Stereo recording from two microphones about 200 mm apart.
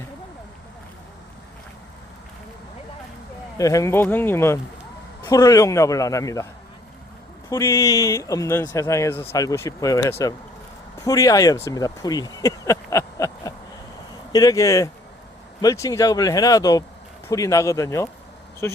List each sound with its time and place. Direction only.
3.6 s speech: 15° left (ahead or behind)
7.5 s speech: 15° left (ahead or behind)